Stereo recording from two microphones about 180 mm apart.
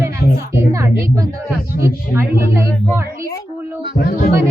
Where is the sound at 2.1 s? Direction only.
15° right (ahead or behind).